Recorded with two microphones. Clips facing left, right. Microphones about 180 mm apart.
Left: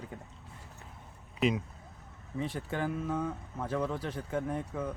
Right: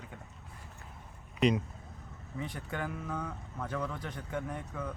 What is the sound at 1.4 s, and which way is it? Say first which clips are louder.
Speech: right 2 dB; 5° left (ahead or behind).